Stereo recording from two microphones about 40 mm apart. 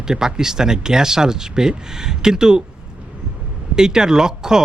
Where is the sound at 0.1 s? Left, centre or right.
Centre.